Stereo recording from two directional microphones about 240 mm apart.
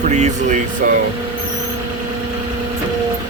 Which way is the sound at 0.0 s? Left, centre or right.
Right.